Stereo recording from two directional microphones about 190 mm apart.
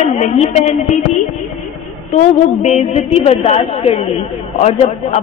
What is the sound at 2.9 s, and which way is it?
A man's voice, 35° left (ahead or behind).